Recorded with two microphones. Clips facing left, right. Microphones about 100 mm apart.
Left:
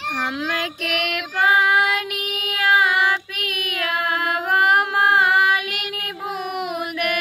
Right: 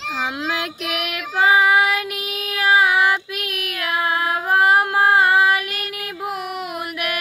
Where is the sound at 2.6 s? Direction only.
10° right (ahead or behind).